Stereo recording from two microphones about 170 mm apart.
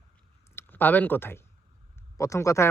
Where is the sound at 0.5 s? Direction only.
10° left (ahead or behind).